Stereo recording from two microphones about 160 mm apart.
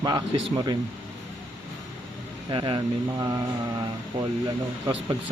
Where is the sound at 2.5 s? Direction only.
30° right (ahead or behind).